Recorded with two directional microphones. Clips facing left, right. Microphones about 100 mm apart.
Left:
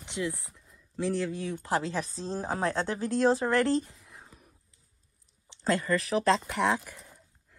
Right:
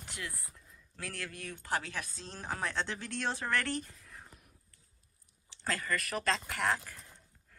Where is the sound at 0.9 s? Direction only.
25° left (ahead or behind).